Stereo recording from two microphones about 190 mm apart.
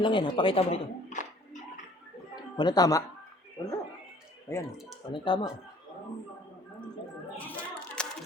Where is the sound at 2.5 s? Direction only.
20° left (ahead or behind).